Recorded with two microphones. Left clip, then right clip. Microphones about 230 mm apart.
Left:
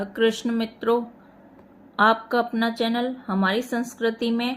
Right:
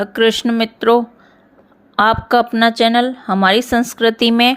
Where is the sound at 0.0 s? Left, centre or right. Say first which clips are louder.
Right 8 dB; right.